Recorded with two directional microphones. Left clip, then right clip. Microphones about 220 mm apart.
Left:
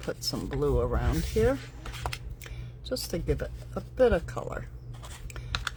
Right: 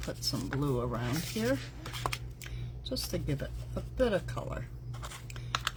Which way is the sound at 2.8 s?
50° left (ahead or behind).